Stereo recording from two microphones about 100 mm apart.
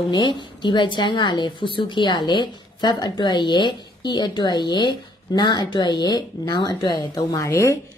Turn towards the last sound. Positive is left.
turn(degrees=30)  # may be behind; listen again after turning